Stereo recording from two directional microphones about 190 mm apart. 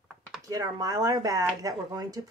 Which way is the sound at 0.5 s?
20° right (ahead or behind).